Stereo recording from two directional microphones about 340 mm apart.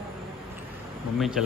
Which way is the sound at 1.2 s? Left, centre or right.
Centre.